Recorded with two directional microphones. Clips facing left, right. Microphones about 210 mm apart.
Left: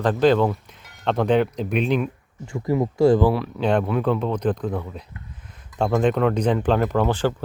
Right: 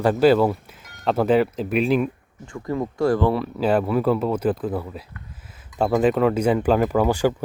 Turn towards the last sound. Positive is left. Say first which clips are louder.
# right 2 dB
turn(degrees=-10)  # may be behind; listen again after turning